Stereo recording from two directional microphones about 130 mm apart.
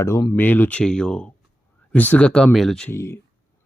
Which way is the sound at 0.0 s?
25° left (ahead or behind).